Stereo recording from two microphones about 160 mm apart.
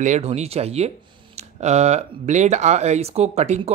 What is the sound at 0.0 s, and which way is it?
Speech, 45° right (ahead or behind).